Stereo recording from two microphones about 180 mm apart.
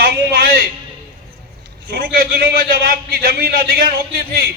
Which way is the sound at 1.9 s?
55° right (ahead or behind).